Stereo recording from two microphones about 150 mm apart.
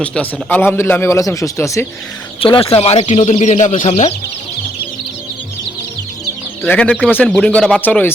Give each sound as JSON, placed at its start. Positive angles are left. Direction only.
{"t": 0.0, "sound": "speech", "side_deg": 10}
{"t": 2.4, "sound": "speech", "side_deg": 35}
{"t": 6.6, "sound": "speech", "side_deg": 5}